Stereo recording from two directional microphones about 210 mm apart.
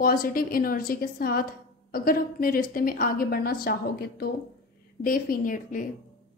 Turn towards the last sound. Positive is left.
turn(degrees=40)  # may be behind; listen again after turning